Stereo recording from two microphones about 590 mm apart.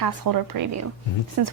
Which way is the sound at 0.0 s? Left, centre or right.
Right.